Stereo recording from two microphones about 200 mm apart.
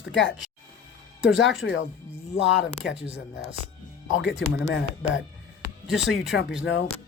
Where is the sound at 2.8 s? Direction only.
60° left (ahead or behind).